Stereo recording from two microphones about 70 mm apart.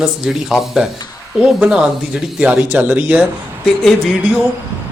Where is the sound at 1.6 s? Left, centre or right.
Centre.